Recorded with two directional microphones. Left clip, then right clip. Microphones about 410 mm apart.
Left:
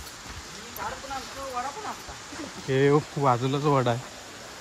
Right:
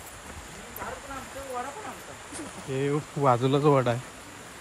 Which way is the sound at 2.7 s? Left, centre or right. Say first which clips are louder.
Left 7 dB; centre.